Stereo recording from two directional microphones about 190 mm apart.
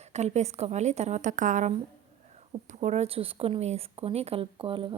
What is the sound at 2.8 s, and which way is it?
Speech, 35° right (ahead or behind).